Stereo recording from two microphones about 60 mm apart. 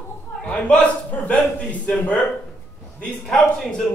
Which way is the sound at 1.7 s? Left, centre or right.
Left.